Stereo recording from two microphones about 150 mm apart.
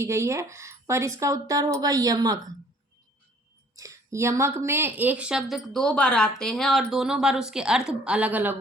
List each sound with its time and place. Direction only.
0.0 s speech: 20° right (ahead or behind)
3.8 s a woman's voice: 20° right (ahead or behind)